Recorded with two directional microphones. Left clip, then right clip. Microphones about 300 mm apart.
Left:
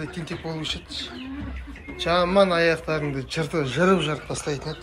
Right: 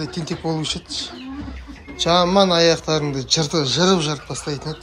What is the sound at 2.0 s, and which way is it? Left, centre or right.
Speech, centre.